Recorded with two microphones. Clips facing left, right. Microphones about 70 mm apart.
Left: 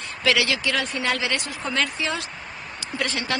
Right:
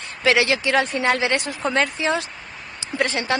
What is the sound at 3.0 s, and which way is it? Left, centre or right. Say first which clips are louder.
Speech: right 5 dB; right.